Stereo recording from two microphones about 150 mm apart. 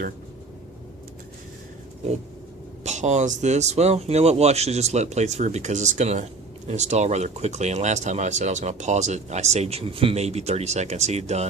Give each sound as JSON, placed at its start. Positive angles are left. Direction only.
{"t": 2.8, "sound": "speech", "side_deg": -50}